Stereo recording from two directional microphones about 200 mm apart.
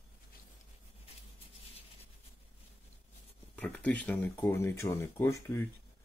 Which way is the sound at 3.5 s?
5° left (ahead or behind).